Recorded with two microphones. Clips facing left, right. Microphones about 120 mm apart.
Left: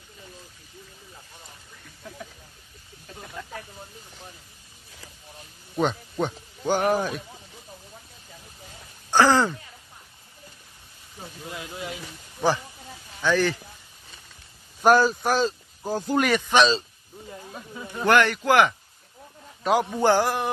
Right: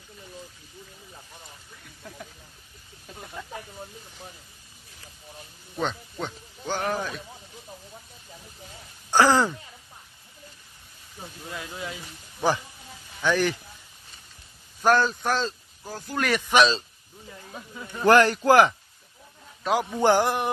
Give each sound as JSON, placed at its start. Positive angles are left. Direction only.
{"t": 3.1, "sound": "snake", "side_deg": -5}
{"t": 5.8, "sound": "speech", "side_deg": 15}
{"t": 9.1, "sound": "a sound", "side_deg": -10}
{"t": 11.5, "sound": "speech", "side_deg": 25}
{"t": 13.2, "sound": "speech", "side_deg": -15}
{"t": 14.8, "sound": "a man's voice", "side_deg": 10}
{"t": 16.3, "sound": "speech", "side_deg": -5}
{"t": 17.5, "sound": "a sound", "side_deg": 5}
{"t": 18.0, "sound": "speech", "side_deg": -35}
{"t": 19.6, "sound": "speech", "side_deg": 5}
{"t": 20.0, "sound": "a man's voice", "side_deg": -20}